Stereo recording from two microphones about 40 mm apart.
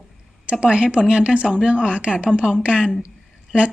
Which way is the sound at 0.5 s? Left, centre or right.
Right.